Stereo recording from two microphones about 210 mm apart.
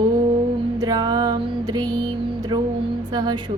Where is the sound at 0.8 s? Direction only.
20° right (ahead or behind).